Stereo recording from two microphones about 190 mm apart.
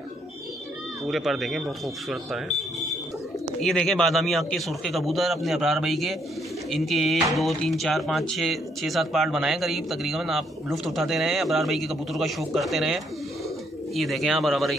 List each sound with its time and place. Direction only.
1.0 s speech: centre (ahead or behind)